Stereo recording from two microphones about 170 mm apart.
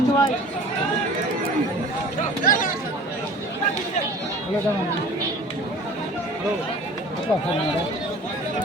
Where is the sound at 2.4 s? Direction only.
55° left (ahead or behind).